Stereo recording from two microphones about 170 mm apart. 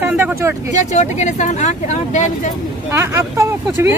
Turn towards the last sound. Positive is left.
turn(degrees=-15)  # may be behind; listen again after turning